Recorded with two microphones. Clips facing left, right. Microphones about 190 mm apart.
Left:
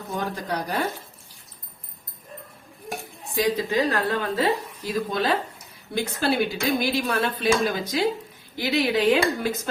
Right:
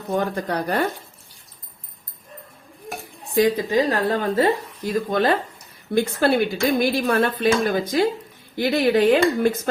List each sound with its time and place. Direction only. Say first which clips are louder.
0.1 s speech: right 6 dB; 60° right (ahead or behind)
3.7 s speech: right 3 dB; 45° right (ahead or behind)